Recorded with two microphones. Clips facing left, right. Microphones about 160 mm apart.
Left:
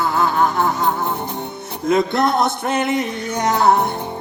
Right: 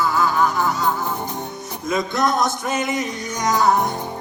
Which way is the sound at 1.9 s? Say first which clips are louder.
Left 4 dB; 60° left (ahead or behind).